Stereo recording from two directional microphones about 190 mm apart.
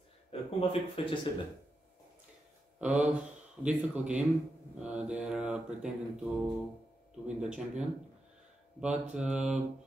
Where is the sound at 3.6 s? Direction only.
5° right (ahead or behind).